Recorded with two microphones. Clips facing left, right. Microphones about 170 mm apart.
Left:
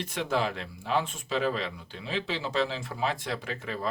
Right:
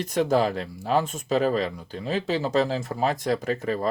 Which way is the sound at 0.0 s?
40° right (ahead or behind).